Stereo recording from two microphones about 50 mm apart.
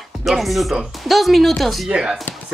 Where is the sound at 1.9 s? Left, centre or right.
Centre.